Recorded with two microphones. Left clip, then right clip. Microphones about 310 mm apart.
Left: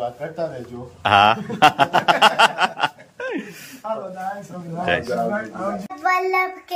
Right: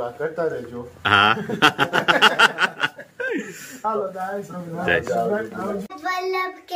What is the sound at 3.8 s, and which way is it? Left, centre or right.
Speech, centre.